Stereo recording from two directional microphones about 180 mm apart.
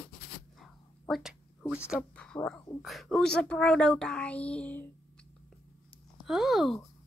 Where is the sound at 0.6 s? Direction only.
Centre (ahead or behind).